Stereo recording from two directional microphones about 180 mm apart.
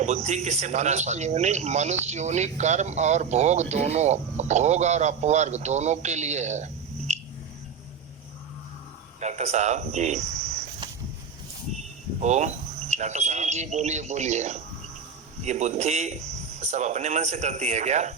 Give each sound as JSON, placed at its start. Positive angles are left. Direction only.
{"t": 0.0, "sound": "speech", "side_deg": -40}
{"t": 9.2, "sound": "speech", "side_deg": -40}
{"t": 12.2, "sound": "speech", "side_deg": -40}